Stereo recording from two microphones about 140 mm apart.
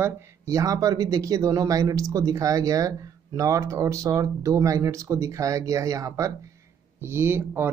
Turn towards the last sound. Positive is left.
turn(degrees=-15)  # may be behind; listen again after turning